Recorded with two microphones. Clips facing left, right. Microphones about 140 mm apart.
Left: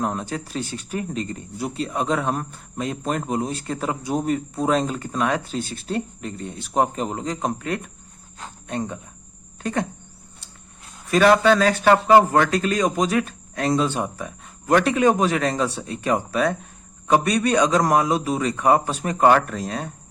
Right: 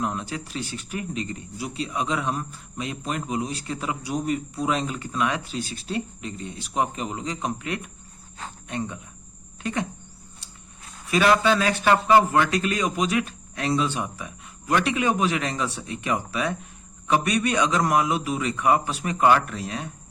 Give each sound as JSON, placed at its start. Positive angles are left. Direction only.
{"t": 0.0, "sound": "speech", "side_deg": 45}
{"t": 11.1, "sound": "a man's voice", "side_deg": 45}